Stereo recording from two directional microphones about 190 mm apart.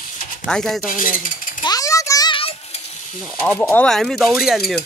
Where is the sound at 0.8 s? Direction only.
45° left (ahead or behind).